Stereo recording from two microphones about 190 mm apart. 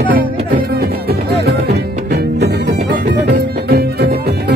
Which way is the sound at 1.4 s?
60° right (ahead or behind).